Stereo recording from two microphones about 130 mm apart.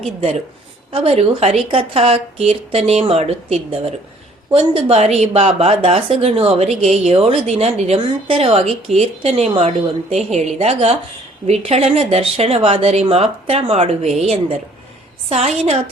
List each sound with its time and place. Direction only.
0.2 s a woman's voice: 55° right (ahead or behind)
0.9 s a woman's voice: 45° right (ahead or behind)